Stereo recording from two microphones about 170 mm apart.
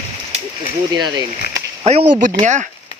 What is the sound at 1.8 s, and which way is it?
Speech, 40° right (ahead or behind).